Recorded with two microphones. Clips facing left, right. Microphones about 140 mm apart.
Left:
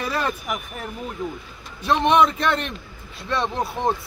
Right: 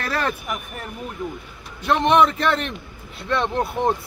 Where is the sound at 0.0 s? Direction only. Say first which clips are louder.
Even; 10° left (ahead or behind).